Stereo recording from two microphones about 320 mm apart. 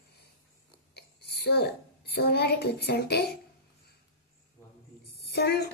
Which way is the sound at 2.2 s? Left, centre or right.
Left.